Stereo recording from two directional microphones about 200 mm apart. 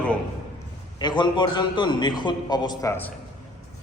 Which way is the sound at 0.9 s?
20° left (ahead or behind).